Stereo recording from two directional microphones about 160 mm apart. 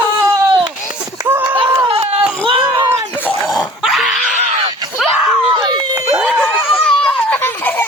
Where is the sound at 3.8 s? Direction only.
Centre (ahead or behind).